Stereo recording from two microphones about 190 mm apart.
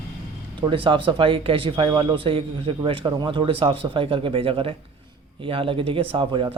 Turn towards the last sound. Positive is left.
turn(degrees=-25)  # may be behind; listen again after turning